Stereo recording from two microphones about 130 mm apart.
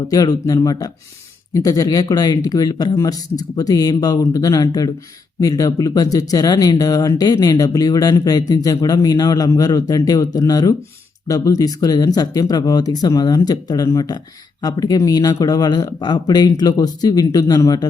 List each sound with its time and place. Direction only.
0.1 s speech: 30° left (ahead or behind)